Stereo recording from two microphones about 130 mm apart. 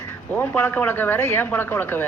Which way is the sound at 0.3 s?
15° left (ahead or behind).